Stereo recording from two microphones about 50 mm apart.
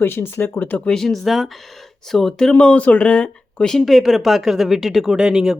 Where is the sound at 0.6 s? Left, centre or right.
Left.